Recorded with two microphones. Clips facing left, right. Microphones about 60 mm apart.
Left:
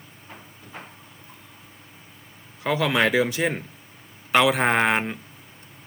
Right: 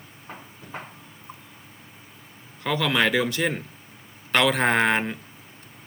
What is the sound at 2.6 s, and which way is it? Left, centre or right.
Speech, centre.